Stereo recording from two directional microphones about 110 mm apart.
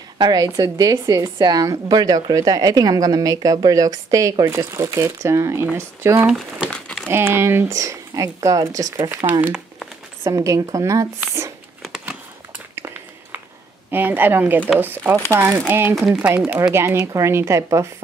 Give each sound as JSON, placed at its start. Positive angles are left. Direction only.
{"t": 0.2, "sound": "a woman's voice", "side_deg": -35}
{"t": 6.7, "sound": "crumpling", "side_deg": 5}
{"t": 7.1, "sound": "speech", "side_deg": -25}
{"t": 9.4, "sound": "crumpling", "side_deg": -10}
{"t": 10.2, "sound": "speech", "side_deg": -30}
{"t": 12.7, "sound": "a sound", "side_deg": -20}
{"t": 13.8, "sound": "speech", "side_deg": -15}
{"t": 17.0, "sound": "speech", "side_deg": -25}